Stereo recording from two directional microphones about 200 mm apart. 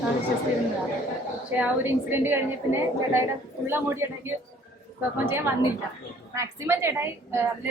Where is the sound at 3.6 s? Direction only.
10° right (ahead or behind).